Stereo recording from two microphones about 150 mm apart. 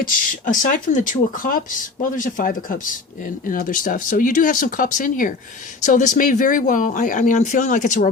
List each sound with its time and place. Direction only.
0.0 s speech: 65° left (ahead or behind)